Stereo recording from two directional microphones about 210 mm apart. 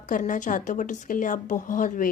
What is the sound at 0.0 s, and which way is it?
A woman's voice, 35° left (ahead or behind).